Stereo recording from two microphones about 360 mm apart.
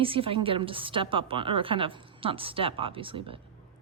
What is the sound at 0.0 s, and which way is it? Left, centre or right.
A woman's voice, centre.